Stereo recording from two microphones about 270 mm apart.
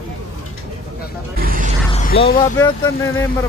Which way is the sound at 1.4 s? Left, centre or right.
Right.